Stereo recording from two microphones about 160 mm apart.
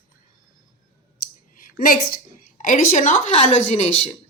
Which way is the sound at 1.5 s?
60° left (ahead or behind).